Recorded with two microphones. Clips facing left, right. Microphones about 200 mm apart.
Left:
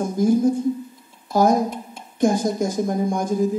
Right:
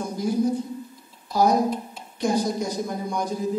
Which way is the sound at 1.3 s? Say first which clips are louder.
Left 2 dB; 50° left (ahead or behind).